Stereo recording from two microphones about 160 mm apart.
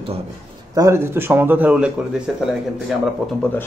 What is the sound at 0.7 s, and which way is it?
A man's voice, 20° right (ahead or behind).